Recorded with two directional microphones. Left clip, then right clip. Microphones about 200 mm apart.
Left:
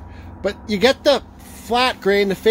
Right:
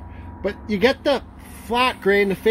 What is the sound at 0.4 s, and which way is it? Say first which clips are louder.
Speech: left 2 dB; 5° left (ahead or behind).